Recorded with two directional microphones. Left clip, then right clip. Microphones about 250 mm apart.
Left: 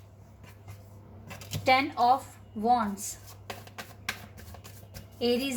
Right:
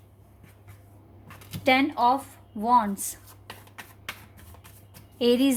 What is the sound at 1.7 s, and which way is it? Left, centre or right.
A woman's voice, right.